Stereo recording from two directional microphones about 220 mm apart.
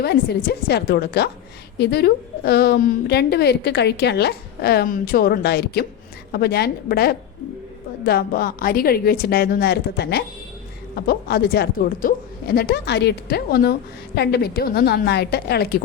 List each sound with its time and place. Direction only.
0.0 s a woman's voice: 45° left (ahead or behind)